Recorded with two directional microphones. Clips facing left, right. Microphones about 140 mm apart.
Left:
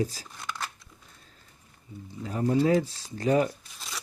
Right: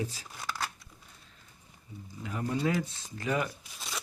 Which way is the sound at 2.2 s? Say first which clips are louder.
Left 7 dB; 35° left (ahead or behind).